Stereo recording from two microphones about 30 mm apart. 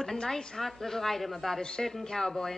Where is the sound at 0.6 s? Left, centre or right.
Centre.